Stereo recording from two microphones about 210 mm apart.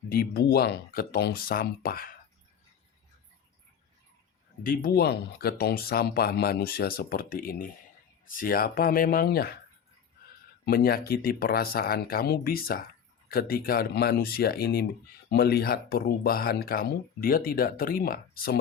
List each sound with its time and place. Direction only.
0.1 s speech: 45° left (ahead or behind)
4.6 s speech: 45° left (ahead or behind)
10.7 s speech: 45° left (ahead or behind)